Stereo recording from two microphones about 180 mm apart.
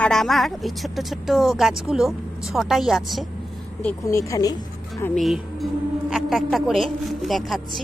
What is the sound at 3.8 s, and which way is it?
Speech, 15° left (ahead or behind).